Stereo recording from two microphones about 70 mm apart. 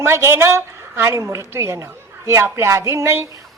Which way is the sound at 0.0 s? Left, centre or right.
Right.